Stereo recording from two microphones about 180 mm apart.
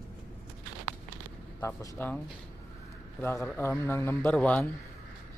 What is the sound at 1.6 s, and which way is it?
Speech, 15° left (ahead or behind).